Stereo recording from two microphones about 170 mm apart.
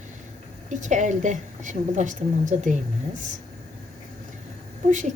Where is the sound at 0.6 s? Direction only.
45° right (ahead or behind).